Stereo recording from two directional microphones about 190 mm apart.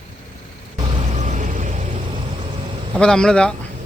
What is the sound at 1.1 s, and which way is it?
Vehicle, 40° right (ahead or behind).